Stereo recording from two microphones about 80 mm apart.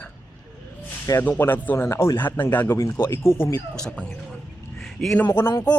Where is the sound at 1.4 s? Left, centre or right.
Left.